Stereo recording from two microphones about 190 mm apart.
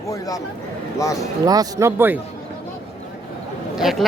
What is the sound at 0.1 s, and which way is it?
Speech, 20° left (ahead or behind).